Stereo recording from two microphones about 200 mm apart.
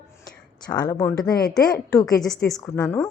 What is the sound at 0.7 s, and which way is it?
A woman's voice, 20° left (ahead or behind).